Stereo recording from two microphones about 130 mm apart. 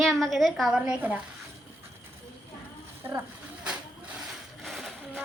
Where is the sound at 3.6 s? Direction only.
5° right (ahead or behind).